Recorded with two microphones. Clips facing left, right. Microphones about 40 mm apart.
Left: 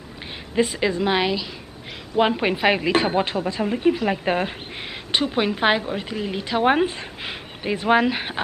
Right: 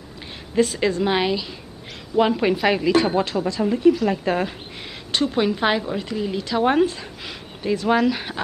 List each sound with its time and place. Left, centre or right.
0.7 s a woman's voice: centre
2.1 s a woman's voice: left